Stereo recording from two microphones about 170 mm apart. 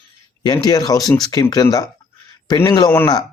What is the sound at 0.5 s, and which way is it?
Speech, 20° left (ahead or behind).